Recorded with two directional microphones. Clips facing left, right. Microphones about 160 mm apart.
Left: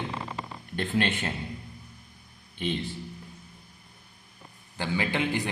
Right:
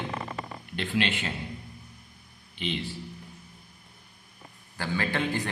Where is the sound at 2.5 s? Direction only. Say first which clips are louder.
Left 2 dB; 50° left (ahead or behind).